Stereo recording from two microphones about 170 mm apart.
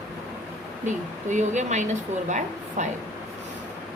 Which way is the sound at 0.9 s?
45° right (ahead or behind).